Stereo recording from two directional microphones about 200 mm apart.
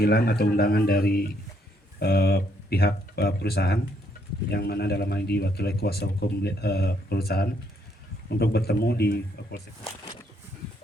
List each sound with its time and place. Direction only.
0.0 s a man's voice: 50° left (ahead or behind)